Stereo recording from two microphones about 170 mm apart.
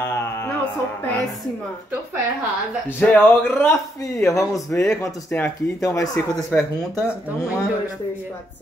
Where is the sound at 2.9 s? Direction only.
10° left (ahead or behind).